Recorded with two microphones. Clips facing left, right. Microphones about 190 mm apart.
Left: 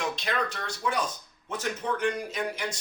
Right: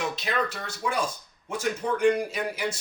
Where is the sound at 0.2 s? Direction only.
5° right (ahead or behind).